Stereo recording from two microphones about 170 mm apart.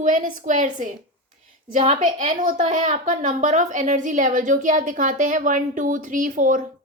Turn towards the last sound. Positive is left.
turn(degrees=-50)  # may be behind; listen again after turning